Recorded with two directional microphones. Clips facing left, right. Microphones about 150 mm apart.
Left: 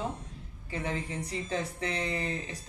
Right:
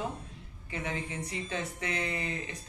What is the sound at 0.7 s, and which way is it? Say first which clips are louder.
A woman's voice: left 2 dB; 35° left (ahead or behind).